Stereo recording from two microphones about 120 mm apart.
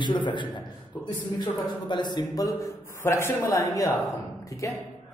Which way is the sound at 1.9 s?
35° left (ahead or behind).